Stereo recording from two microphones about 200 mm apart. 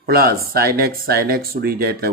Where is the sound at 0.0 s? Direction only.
50° right (ahead or behind).